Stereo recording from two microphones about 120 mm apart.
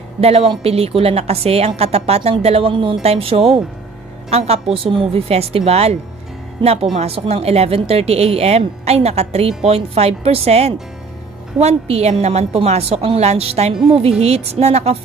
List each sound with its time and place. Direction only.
0.2 s a woman's voice: 55° right (ahead or behind)
4.7 s a woman's voice: 50° right (ahead or behind)